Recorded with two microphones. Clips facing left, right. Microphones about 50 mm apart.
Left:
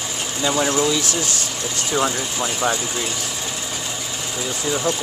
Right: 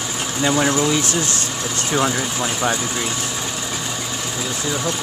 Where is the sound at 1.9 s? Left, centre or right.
Centre.